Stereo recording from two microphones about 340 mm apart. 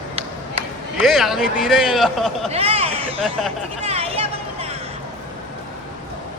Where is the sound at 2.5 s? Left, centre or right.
Centre.